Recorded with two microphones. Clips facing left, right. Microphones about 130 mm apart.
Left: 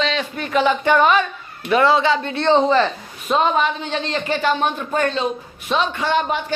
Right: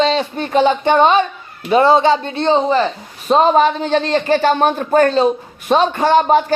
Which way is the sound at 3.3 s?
35° right (ahead or behind).